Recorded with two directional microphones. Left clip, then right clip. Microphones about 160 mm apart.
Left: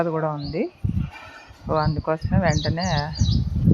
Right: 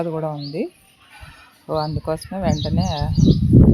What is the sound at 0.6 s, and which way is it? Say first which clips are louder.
Speech: even; 25° right (ahead or behind).